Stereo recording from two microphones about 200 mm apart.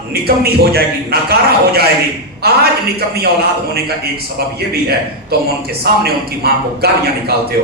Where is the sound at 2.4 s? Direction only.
50° right (ahead or behind).